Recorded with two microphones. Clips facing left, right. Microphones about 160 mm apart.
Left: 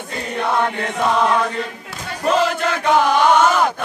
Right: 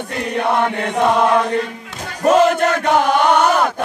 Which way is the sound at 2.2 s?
45° right (ahead or behind).